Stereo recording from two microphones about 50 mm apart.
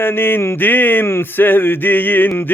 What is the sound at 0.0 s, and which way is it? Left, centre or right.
Speech, left.